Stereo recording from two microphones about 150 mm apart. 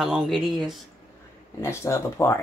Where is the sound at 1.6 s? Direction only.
20° left (ahead or behind).